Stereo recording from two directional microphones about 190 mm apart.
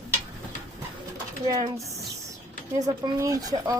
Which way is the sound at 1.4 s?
20° right (ahead or behind).